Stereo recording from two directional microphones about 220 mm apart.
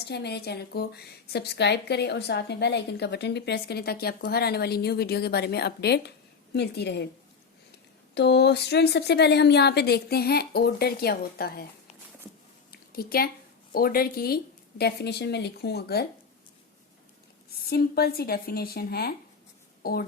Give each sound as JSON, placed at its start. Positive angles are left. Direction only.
{"t": 0.1, "sound": "a woman's voice", "side_deg": 50}
{"t": 8.1, "sound": "a woman's voice", "side_deg": 50}
{"t": 12.7, "sound": "a sound", "side_deg": 45}
{"t": 13.7, "sound": "a woman's voice", "side_deg": 40}
{"t": 17.7, "sound": "a woman's voice", "side_deg": 45}